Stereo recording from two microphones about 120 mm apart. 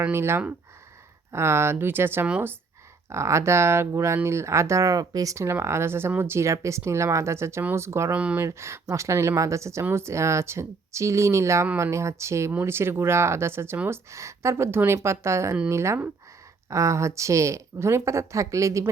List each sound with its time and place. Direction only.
0.0 s speech: 20° right (ahead or behind)
3.1 s speech: 25° right (ahead or behind)
8.1 s speech: 10° right (ahead or behind)
8.4 s speech: 25° right (ahead or behind)